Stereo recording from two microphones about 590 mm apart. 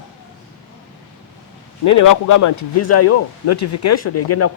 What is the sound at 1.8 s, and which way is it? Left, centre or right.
A man's voice, left.